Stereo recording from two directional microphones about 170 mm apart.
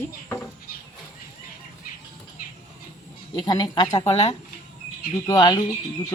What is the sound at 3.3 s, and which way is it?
A woman's voice, 25° left (ahead or behind).